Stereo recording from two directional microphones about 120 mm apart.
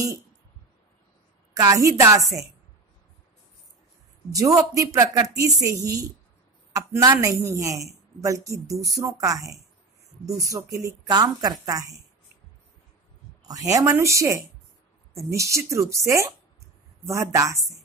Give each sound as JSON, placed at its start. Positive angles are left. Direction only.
{"t": 1.5, "sound": "speech", "side_deg": -30}
{"t": 4.3, "sound": "speech", "side_deg": -30}
{"t": 6.7, "sound": "speech", "side_deg": -30}
{"t": 13.4, "sound": "speech", "side_deg": -30}